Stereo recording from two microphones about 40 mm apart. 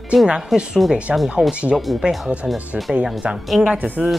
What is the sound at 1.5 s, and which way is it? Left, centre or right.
Speech, right.